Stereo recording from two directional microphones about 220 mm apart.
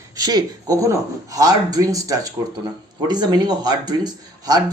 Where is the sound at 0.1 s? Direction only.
20° right (ahead or behind).